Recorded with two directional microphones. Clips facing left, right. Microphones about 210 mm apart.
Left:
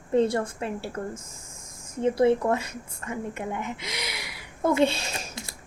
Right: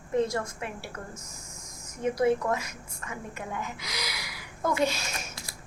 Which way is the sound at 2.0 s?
30° left (ahead or behind).